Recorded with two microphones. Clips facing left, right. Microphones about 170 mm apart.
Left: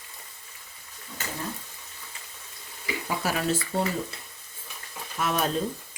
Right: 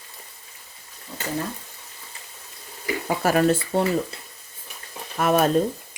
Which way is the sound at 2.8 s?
50° right (ahead or behind).